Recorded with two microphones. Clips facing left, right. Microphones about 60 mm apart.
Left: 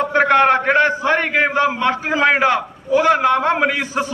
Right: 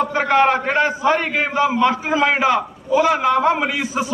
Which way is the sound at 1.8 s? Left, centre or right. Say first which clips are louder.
Right 1 dB; left.